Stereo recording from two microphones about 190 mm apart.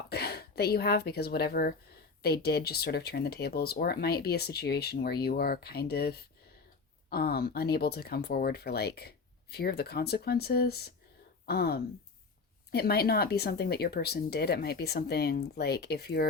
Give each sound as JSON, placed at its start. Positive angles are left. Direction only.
{"t": 0.1, "sound": "speech", "side_deg": 55}